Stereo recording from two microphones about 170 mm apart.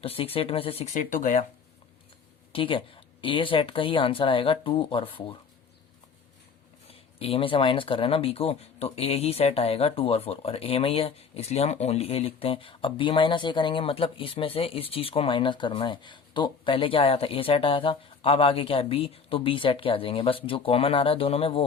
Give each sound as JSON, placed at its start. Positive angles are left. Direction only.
{"t": 0.0, "sound": "speech", "side_deg": 35}
{"t": 1.1, "sound": "speech", "side_deg": 45}
{"t": 2.5, "sound": "speech", "side_deg": 30}
{"t": 6.8, "sound": "speech", "side_deg": 35}